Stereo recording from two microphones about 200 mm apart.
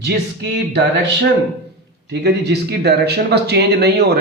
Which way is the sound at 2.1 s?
55° right (ahead or behind).